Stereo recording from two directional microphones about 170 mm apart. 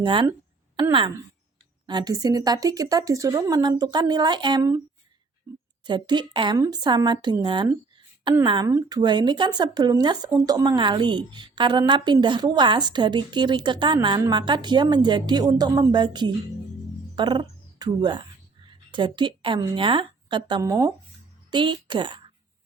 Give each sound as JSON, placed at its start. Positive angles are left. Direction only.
{"t": 0.0, "sound": "speech", "side_deg": -30}
{"t": 5.5, "sound": "a sound", "side_deg": -20}
{"t": 5.8, "sound": "speech", "side_deg": -25}